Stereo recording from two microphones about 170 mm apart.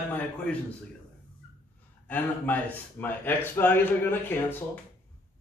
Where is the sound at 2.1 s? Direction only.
10° left (ahead or behind).